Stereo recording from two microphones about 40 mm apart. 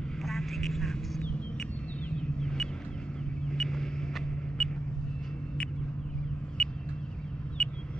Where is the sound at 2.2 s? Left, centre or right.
Centre.